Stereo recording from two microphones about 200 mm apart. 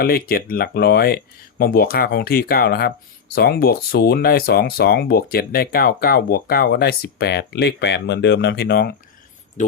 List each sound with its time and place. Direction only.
0.0 s speech: 50° left (ahead or behind)
9.6 s speech: 40° left (ahead or behind)